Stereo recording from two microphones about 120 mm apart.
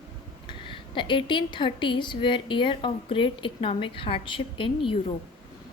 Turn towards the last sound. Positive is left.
turn(degrees=45)  # may be behind; listen again after turning